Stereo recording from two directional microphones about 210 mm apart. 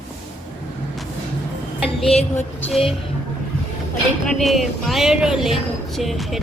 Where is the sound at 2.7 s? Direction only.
30° left (ahead or behind).